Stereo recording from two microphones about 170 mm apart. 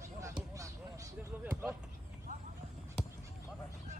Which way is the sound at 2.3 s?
45° right (ahead or behind).